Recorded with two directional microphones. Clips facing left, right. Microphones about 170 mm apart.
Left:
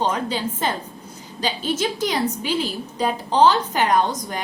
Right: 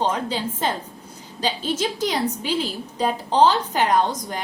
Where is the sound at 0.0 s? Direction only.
30° right (ahead or behind).